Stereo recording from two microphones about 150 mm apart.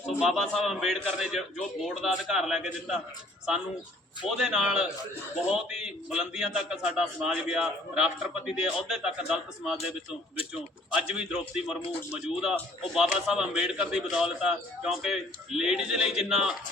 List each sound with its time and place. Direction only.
0.2 s a man's voice: centre (ahead or behind)
4.3 s a man's voice: 5° right (ahead or behind)